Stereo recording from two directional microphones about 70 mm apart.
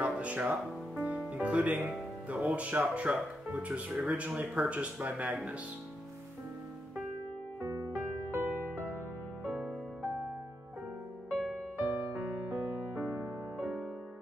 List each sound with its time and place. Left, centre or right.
0.0 s music: centre
1.9 s speech: centre
7.6 s music: right
9.5 s music: centre
11.8 s music: right
13.6 s music: centre